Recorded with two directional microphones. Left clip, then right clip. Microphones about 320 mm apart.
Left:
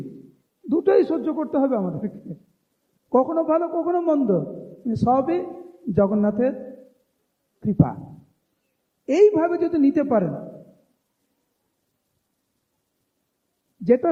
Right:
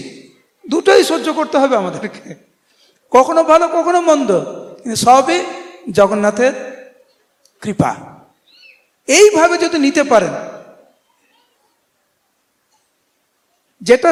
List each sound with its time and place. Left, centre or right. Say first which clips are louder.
0.7 s a man's voice: right 8 dB; centre
4.4 s a sound: right 8 dB; centre
4.9 s a man's voice: right 11 dB; centre
9.0 s a man's voice: right 8 dB; centre
13.8 s a man's voice: right 8 dB; centre